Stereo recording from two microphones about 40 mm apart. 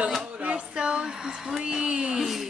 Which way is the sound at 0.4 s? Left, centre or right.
Right.